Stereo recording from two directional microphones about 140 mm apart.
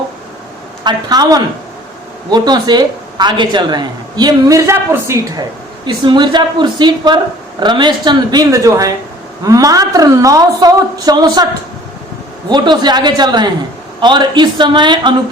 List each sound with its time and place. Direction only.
0.9 s a woman's voice: 30° right (ahead or behind)
5.8 s a woman's voice: 35° right (ahead or behind)
12.5 s a woman's voice: 30° right (ahead or behind)